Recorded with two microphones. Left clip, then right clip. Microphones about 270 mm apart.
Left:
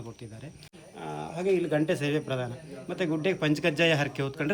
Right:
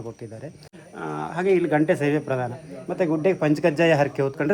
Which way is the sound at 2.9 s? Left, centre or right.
Centre.